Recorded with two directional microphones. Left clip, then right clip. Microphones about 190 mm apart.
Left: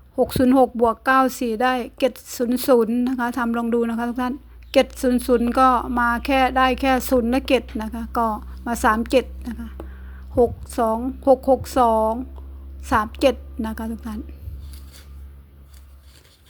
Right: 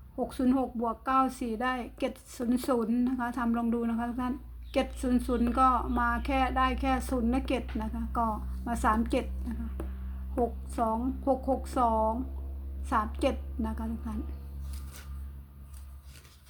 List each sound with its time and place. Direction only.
0.2 s a woman's voice: 35° left (ahead or behind)